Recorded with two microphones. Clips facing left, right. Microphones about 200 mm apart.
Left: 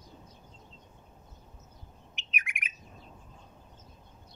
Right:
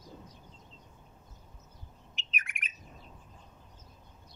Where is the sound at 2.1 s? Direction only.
15° left (ahead or behind).